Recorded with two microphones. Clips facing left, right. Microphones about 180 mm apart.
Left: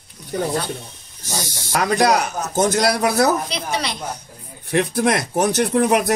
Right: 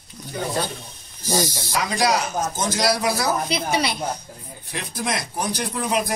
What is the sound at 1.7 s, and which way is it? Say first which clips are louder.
Speech: left 6 dB; 60° left (ahead or behind).